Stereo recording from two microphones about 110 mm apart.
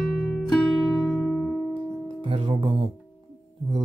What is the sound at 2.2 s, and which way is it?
Music, 45° right (ahead or behind).